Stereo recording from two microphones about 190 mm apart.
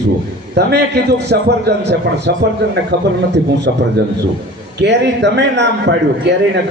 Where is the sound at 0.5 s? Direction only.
60° right (ahead or behind).